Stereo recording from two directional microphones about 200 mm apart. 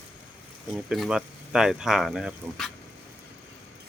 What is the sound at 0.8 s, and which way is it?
Speech, centre (ahead or behind).